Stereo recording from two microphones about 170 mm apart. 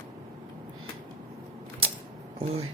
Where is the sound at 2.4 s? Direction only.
35° right (ahead or behind).